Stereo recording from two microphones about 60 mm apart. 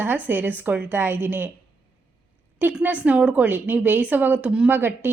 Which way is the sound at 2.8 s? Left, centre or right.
Right.